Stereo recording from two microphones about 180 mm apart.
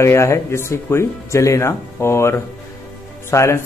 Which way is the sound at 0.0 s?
15° left (ahead or behind).